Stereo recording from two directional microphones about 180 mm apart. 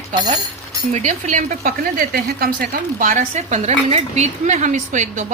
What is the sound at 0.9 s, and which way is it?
A woman's voice, 40° right (ahead or behind).